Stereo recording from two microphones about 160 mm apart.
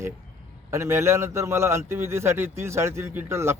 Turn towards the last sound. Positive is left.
turn(degrees=-15)  # may be behind; listen again after turning